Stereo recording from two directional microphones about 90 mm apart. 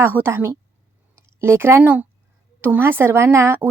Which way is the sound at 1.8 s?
15° right (ahead or behind).